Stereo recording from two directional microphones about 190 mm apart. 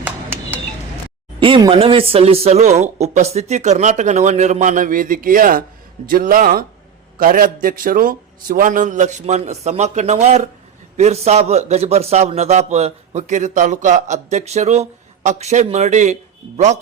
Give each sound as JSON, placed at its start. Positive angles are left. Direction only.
{"t": 1.4, "sound": "a man's voice", "side_deg": -25}